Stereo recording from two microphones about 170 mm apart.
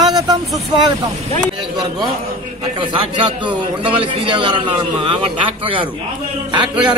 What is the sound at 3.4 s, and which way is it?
A man's voice, 30° right (ahead or behind).